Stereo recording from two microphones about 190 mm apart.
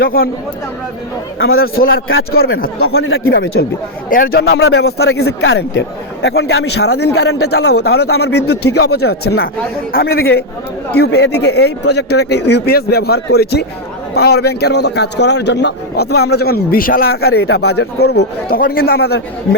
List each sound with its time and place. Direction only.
0.0 s speech: 50° left (ahead or behind)
1.8 s speech: 50° left (ahead or behind)
2.8 s speech: 90° left
3.2 s a man's voice: 55° left (ahead or behind); by 5.8 s 75° left (ahead or behind)
6.2 s a man's voice: 60° left (ahead or behind)